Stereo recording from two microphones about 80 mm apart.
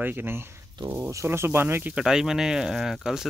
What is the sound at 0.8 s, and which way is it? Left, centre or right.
Speech, right.